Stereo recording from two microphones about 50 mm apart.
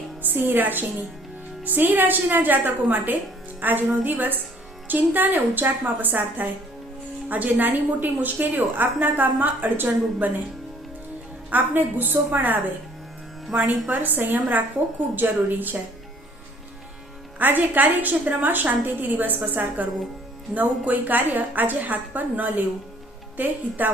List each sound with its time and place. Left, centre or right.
0.2 s a woman's voice: right
11.5 s a woman's voice: right
17.3 s a woman's voice: right